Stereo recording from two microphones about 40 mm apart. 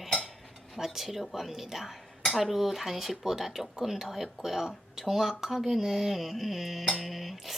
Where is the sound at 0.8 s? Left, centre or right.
Centre.